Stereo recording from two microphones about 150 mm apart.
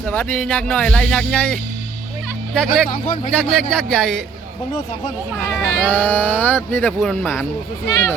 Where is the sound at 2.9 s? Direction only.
70° left (ahead or behind).